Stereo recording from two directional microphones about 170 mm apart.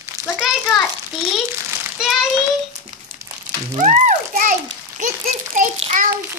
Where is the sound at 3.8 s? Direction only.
45° right (ahead or behind).